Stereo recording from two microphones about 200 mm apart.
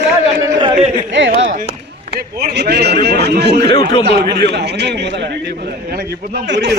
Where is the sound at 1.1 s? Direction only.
65° right (ahead or behind).